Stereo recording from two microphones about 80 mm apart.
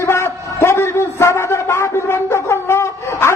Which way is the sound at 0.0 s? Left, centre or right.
Left.